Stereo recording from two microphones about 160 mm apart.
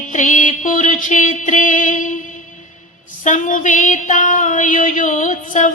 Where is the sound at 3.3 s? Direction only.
50° left (ahead or behind).